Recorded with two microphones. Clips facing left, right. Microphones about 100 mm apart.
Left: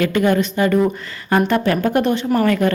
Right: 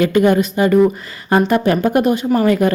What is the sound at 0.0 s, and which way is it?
Speech, 20° right (ahead or behind).